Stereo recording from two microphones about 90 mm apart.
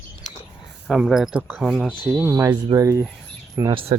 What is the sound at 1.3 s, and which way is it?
Speech, 15° right (ahead or behind).